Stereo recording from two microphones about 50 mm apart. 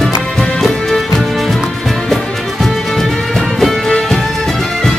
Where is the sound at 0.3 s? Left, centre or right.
Centre.